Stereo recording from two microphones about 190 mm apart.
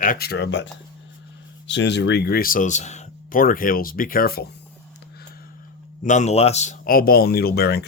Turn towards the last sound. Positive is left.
turn(degrees=55)  # may be behind; listen again after turning